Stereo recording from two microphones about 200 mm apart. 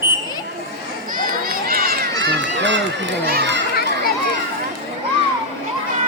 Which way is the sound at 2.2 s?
60° right (ahead or behind).